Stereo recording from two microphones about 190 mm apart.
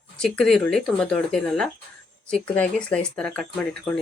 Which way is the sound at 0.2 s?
Centre (ahead or behind).